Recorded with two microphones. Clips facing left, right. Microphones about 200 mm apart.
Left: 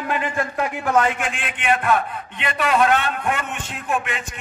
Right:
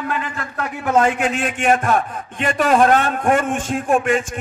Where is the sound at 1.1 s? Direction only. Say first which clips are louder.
Right 8 dB; 40° right (ahead or behind).